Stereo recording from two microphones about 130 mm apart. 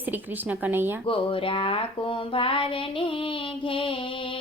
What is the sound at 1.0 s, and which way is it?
Speech, 40° left (ahead or behind).